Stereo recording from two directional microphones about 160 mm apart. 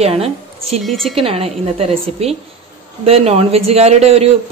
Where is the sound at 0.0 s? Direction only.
40° right (ahead or behind).